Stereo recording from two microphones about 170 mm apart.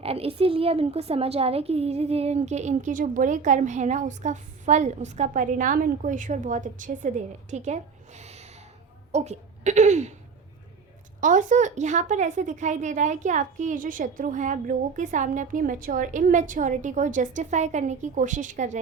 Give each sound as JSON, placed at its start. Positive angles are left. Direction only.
{"t": 0.0, "sound": "a woman's voice", "side_deg": -35}
{"t": 11.2, "sound": "speech", "side_deg": -50}